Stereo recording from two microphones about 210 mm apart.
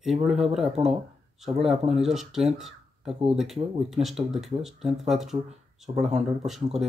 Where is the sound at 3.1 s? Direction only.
30° right (ahead or behind).